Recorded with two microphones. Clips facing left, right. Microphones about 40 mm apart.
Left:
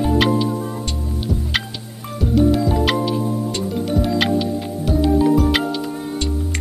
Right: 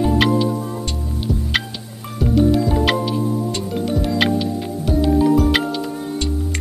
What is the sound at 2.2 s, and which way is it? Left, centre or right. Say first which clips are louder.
Music: even; centre.